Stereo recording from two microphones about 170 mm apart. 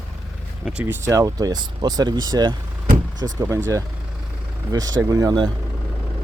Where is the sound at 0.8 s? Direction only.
15° right (ahead or behind).